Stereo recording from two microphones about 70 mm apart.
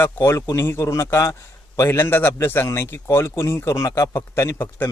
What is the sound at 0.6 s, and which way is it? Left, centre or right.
A man's voice, left.